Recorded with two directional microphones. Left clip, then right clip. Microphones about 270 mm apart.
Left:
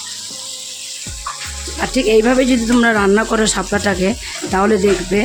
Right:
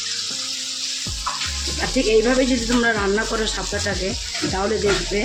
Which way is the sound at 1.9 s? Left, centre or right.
Left.